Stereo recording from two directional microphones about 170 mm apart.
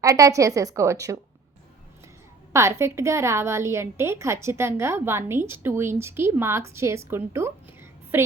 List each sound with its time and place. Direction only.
0.0 s a woman's voice: 20° right (ahead or behind)
2.5 s a woman's voice: 15° right (ahead or behind)